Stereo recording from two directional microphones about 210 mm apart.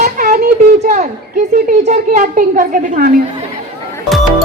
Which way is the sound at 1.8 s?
40° right (ahead or behind).